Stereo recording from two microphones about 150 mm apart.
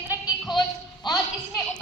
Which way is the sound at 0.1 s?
5° right (ahead or behind).